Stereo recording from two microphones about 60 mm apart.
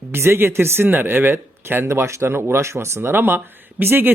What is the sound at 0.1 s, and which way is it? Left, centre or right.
Speech, right.